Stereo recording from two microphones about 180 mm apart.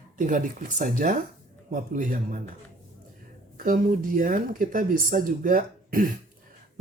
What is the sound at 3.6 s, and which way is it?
Speech, 50° right (ahead or behind).